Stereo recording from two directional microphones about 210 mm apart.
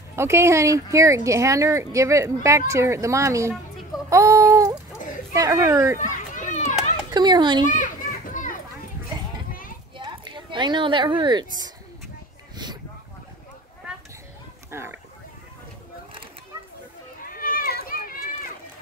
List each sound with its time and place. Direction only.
0.1 s speech: 10° right (ahead or behind)
4.1 s child singing: 15° right (ahead or behind)
5.3 s speech: 15° right (ahead or behind)
5.9 s children playing: 40° left (ahead or behind)
7.1 s a child's voice: 20° right (ahead or behind)
7.6 s children playing: 35° left (ahead or behind)
9.9 s speech: 20° right (ahead or behind)
14.7 s a sound: 10° right (ahead or behind)
17.3 s run: 45° left (ahead or behind)